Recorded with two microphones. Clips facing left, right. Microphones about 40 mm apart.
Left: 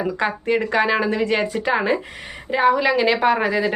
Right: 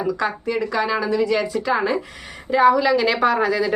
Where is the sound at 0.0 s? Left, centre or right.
Left.